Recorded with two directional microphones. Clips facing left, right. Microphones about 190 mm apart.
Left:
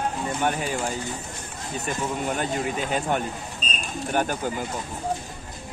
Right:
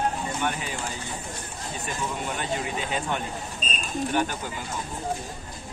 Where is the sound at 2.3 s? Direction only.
45° left (ahead or behind).